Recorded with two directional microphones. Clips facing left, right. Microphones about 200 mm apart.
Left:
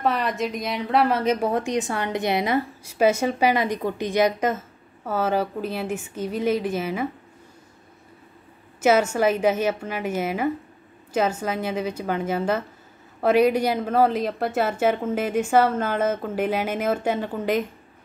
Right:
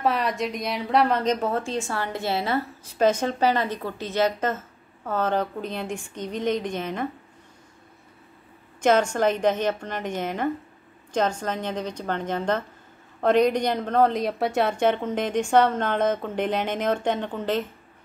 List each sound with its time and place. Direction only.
0.0 s a woman's voice: centre (ahead or behind)
8.8 s a woman's voice: 5° left (ahead or behind)